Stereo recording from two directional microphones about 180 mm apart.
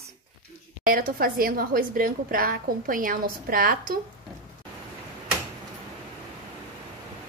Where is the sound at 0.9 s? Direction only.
55° right (ahead or behind).